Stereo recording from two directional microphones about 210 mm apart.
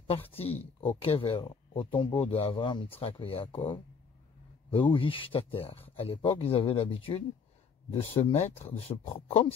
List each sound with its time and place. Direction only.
0.0 s speech: 25° left (ahead or behind)